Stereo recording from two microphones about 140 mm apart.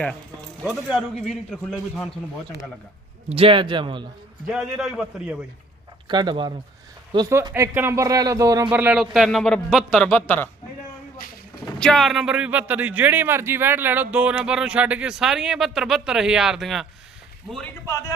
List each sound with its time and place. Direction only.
1.1 s a man's voice: 5° right (ahead or behind)
3.2 s a man's voice: 45° right (ahead or behind)
4.4 s a man's voice: centre (ahead or behind)
6.1 s a man's voice: 35° right (ahead or behind)
7.3 s speech: 20° right (ahead or behind)
8.7 s a man's voice: 10° right (ahead or behind); by 10.5 s 10° left (ahead or behind)
11.6 s a man's voice: 5° left (ahead or behind)